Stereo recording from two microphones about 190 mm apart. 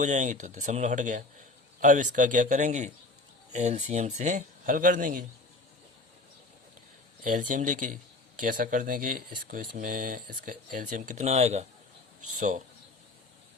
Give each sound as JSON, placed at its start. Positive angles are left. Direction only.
{"t": 0.0, "sound": "speech", "side_deg": -40}
{"t": 7.3, "sound": "speech", "side_deg": -45}